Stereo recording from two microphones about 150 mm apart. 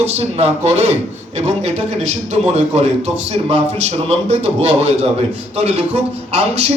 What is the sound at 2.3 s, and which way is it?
A man's voice, 50° right (ahead or behind).